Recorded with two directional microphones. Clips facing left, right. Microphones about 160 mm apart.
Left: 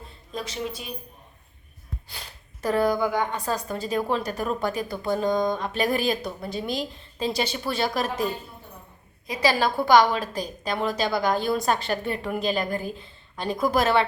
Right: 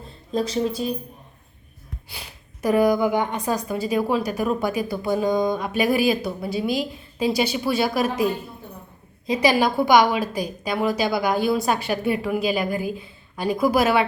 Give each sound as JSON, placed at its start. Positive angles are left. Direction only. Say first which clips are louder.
{"t": 0.3, "sound": "speech", "louder": "right 9 dB", "side_deg": -35}
{"t": 2.0, "sound": "a woman's voice", "louder": "right 2 dB", "side_deg": -10}
{"t": 9.2, "sound": "a woman's voice", "louder": "right 4 dB", "side_deg": -20}